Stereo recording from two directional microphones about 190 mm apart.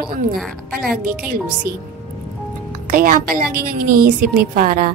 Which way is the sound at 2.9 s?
50° right (ahead or behind).